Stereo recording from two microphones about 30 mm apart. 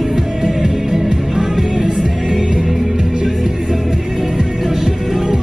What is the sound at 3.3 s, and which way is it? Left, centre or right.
Music, centre.